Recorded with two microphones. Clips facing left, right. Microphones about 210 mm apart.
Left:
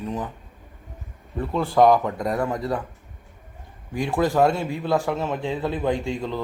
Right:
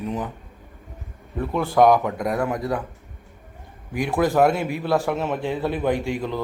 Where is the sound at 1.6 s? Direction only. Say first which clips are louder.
Even; centre (ahead or behind).